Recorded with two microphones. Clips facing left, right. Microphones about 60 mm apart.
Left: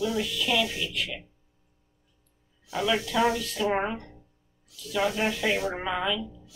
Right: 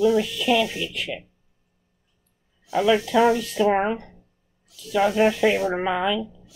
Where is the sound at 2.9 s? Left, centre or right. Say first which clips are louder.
Right 7 dB; right.